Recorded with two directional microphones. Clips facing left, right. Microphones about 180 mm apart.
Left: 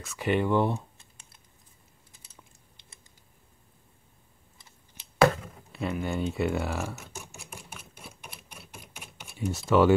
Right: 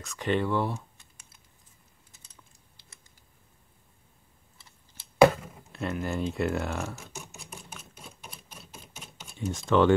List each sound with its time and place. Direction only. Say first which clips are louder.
0.0 s speech: left 1 dB; 5° left (ahead or behind)
5.4 s typing: left 1 dB; centre (ahead or behind)
8.9 s a sound: even; 10° left (ahead or behind)